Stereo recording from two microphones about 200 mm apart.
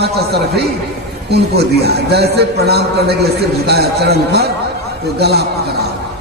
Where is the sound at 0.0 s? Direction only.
55° right (ahead or behind).